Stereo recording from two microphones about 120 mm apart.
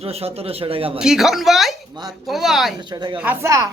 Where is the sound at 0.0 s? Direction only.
55° right (ahead or behind).